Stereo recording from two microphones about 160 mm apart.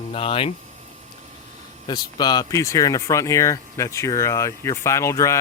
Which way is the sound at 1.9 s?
25° left (ahead or behind).